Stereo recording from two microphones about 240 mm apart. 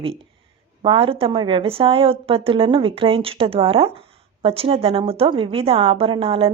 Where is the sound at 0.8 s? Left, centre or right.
Right.